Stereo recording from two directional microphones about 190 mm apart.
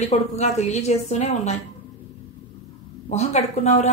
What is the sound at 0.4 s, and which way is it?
A woman's voice, 35° left (ahead or behind).